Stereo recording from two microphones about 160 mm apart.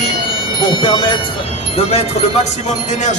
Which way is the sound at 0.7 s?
30° left (ahead or behind).